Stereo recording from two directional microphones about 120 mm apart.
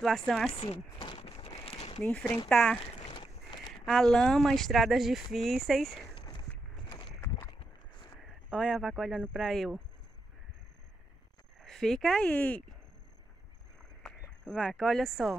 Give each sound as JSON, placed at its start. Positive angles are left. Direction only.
{"t": 0.0, "sound": "speech", "side_deg": 0}
{"t": 0.5, "sound": "speech", "side_deg": 55}
{"t": 1.5, "sound": "a sound", "side_deg": 50}
{"t": 2.4, "sound": "speech", "side_deg": 5}
{"t": 3.1, "sound": "a sound", "side_deg": 45}
{"t": 3.7, "sound": "speech", "side_deg": 5}
{"t": 6.9, "sound": "a sound", "side_deg": 45}
{"t": 7.2, "sound": "clip-clop", "side_deg": 25}
{"t": 8.5, "sound": "speech", "side_deg": 0}
{"t": 11.6, "sound": "speech", "side_deg": 5}
{"t": 14.0, "sound": "speech", "side_deg": 5}